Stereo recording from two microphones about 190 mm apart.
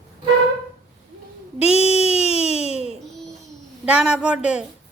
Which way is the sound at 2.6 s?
35° left (ahead or behind).